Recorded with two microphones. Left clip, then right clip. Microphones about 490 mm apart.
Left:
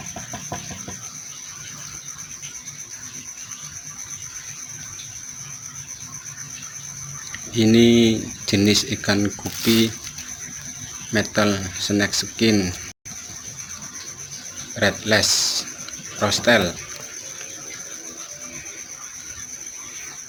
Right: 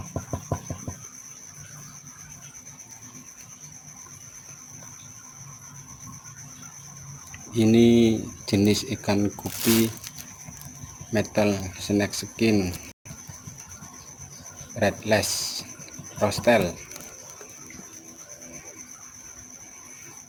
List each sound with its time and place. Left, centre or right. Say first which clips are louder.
7.5 s speech: left 3 dB; right
11.1 s speech: left 3 dB; right
14.8 s speech: left 4 dB; right